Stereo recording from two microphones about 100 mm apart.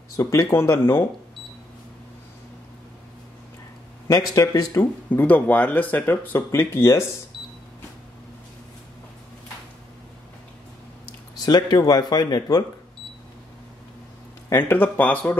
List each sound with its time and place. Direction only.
0.2 s speech: 30° left (ahead or behind)
4.1 s a man's voice: 35° left (ahead or behind)
5.1 s speech: 15° left (ahead or behind)
11.3 s speech: 40° left (ahead or behind)
14.5 s speech: 20° left (ahead or behind)